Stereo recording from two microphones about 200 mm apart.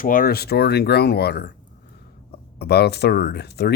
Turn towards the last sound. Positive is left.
turn(degrees=55)  # may be behind; listen again after turning